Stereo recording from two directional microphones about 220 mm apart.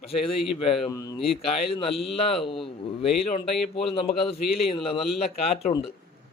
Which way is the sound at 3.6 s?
25° left (ahead or behind).